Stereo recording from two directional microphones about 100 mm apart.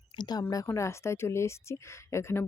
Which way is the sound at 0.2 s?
40° left (ahead or behind).